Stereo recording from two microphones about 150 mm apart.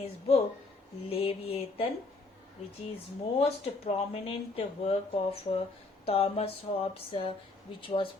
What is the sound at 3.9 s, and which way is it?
Speech, 40° left (ahead or behind).